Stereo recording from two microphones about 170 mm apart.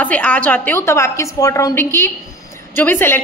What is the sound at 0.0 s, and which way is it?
A woman's voice, 10° left (ahead or behind).